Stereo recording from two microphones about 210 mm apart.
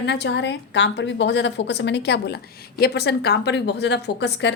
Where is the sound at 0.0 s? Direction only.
55° left (ahead or behind).